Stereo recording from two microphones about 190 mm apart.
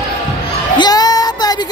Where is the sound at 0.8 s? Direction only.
20° left (ahead or behind).